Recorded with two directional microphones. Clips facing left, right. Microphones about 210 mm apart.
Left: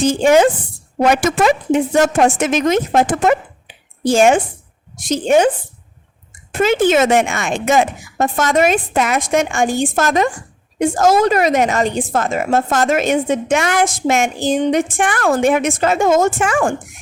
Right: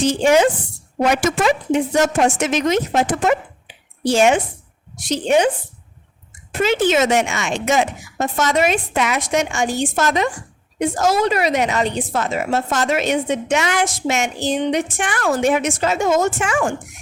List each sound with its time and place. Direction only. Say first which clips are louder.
0.0 s a woman's voice: left 3 dB; 50° left (ahead or behind)
6.5 s a woman's voice: left 3 dB; 50° left (ahead or behind)